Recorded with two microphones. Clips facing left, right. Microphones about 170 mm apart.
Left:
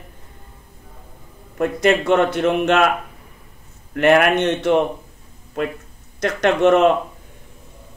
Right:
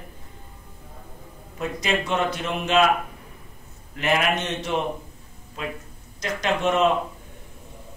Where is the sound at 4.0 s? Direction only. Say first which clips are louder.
Left 9 dB; 60° left (ahead or behind).